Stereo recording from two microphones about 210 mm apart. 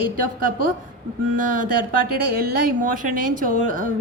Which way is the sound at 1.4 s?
40° right (ahead or behind).